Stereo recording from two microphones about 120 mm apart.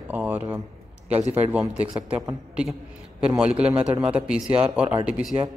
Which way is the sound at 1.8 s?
10° right (ahead or behind).